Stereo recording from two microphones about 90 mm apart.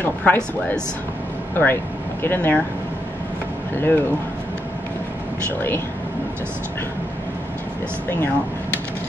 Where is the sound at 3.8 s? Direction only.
25° left (ahead or behind).